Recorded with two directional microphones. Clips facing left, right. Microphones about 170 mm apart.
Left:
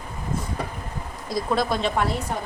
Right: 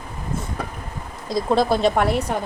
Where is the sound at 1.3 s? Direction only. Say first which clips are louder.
Right 5 dB; 25° right (ahead or behind).